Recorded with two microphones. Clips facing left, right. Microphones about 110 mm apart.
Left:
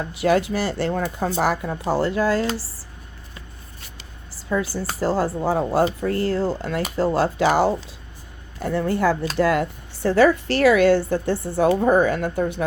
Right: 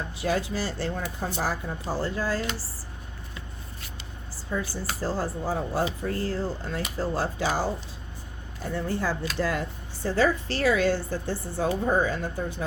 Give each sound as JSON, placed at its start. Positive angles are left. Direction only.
{"t": 0.1, "sound": "speech", "side_deg": 70}
{"t": 4.4, "sound": "a sound", "side_deg": 80}
{"t": 4.9, "sound": "speech", "side_deg": 75}